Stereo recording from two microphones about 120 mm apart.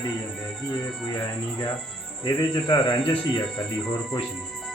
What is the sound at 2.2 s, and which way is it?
Speech, 40° left (ahead or behind).